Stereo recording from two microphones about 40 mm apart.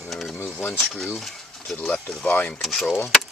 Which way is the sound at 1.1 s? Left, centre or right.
Centre.